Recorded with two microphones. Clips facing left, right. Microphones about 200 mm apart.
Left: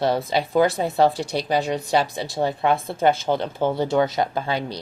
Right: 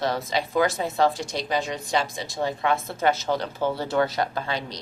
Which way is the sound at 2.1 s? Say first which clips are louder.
Left 5 dB; 65° left (ahead or behind).